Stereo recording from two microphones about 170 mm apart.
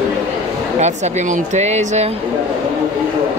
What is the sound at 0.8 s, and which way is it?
A woman's voice, 45° right (ahead or behind).